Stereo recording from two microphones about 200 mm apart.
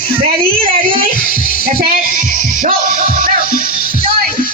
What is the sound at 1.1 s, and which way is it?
Music, 45° left (ahead or behind).